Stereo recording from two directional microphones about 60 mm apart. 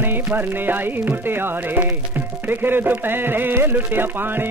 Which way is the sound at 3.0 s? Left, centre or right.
Right.